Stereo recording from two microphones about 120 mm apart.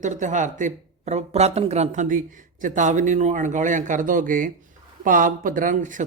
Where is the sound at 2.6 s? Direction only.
90° right.